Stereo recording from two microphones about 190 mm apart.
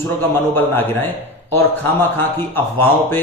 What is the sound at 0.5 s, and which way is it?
Speech, 10° left (ahead or behind).